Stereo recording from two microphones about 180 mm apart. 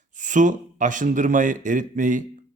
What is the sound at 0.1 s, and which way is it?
A man's voice, 45° right (ahead or behind).